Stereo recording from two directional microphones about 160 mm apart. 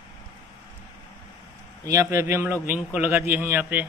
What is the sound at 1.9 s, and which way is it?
A man's voice, 20° right (ahead or behind).